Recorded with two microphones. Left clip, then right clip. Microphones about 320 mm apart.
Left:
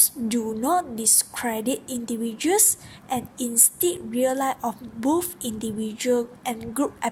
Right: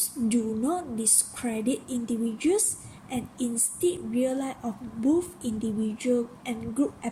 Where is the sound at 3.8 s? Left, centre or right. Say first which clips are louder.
Left 1 dB; left.